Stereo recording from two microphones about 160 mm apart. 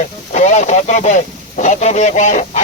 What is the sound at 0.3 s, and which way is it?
Speech, 45° left (ahead or behind).